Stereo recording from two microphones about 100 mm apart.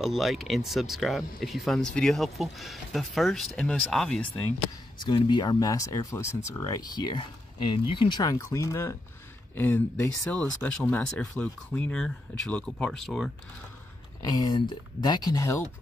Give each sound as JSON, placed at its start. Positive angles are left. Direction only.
{"t": 0.0, "sound": "speech", "side_deg": 0}
{"t": 4.9, "sound": "speech", "side_deg": 50}
{"t": 5.6, "sound": "speech", "side_deg": 35}
{"t": 7.5, "sound": "speech", "side_deg": 65}
{"t": 8.2, "sound": "speech", "side_deg": 35}
{"t": 14.2, "sound": "speech", "side_deg": 40}